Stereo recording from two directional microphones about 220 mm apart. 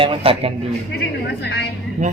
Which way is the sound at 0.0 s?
25° right (ahead or behind).